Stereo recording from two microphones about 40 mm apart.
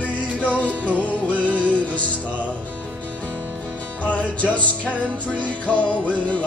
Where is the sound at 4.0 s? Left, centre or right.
Left.